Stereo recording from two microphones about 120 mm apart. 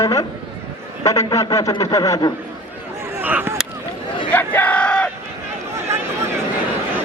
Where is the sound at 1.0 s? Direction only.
30° left (ahead or behind).